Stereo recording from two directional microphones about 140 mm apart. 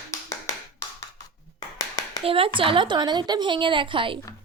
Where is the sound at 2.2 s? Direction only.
40° right (ahead or behind).